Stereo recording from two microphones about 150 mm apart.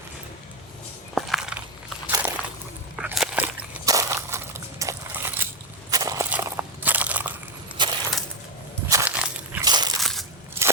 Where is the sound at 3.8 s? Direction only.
20° right (ahead or behind).